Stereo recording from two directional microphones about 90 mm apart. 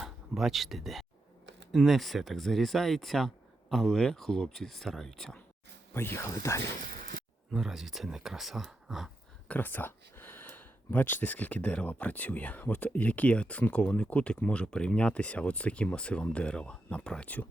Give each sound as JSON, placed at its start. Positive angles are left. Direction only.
{"t": 0.0, "sound": "speech", "side_deg": -5}
{"t": 5.9, "sound": "speech", "side_deg": 25}
{"t": 7.5, "sound": "speech", "side_deg": -5}
{"t": 9.5, "sound": "speech", "side_deg": 20}